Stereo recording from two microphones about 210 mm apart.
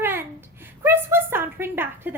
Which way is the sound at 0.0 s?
10° right (ahead or behind).